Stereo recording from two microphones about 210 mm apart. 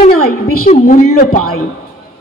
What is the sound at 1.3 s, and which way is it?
Speech, 90° left.